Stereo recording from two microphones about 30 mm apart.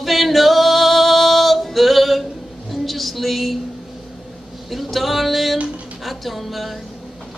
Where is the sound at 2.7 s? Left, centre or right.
Centre.